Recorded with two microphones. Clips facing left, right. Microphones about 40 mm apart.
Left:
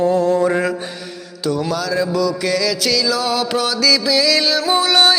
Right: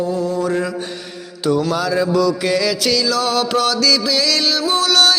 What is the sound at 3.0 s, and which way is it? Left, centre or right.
Music, centre.